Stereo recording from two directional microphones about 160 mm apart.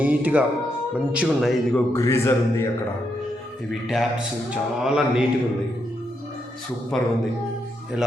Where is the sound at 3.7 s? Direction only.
Centre (ahead or behind).